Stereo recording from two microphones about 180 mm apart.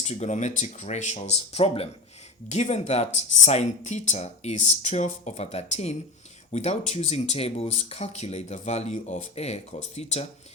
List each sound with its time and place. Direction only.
0.0 s speech: 35° left (ahead or behind)